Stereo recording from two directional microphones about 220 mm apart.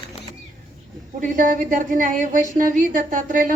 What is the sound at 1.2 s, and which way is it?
A man's voice, 35° right (ahead or behind).